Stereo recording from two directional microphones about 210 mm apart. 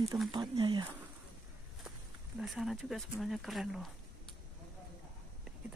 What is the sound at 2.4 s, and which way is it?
Speech, centre (ahead or behind).